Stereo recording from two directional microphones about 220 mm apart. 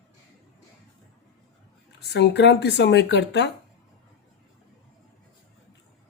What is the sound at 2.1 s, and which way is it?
Speech, 50° left (ahead or behind).